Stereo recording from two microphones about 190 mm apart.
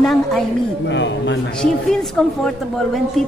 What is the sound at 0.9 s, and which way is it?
Speech, 70° left (ahead or behind).